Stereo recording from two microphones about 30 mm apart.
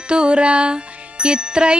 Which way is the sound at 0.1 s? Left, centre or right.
Right.